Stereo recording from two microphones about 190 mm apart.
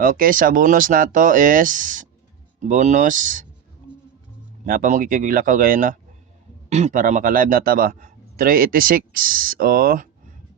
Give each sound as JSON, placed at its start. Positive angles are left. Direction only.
{"t": 0.0, "sound": "a man's voice", "side_deg": -50}
{"t": 4.6, "sound": "a man's voice", "side_deg": -45}